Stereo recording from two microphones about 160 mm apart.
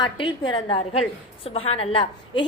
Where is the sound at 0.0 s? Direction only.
30° left (ahead or behind).